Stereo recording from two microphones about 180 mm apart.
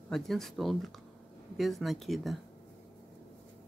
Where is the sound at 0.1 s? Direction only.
Centre (ahead or behind).